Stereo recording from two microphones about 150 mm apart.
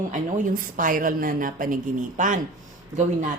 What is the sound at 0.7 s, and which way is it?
A woman's voice, 65° right (ahead or behind).